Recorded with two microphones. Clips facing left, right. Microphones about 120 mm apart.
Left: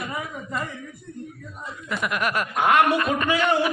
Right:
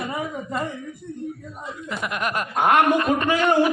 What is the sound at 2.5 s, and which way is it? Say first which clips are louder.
Speech: right 2 dB; 50° right (ahead or behind).